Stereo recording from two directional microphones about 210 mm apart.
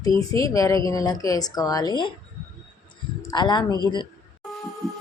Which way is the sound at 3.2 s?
20° left (ahead or behind).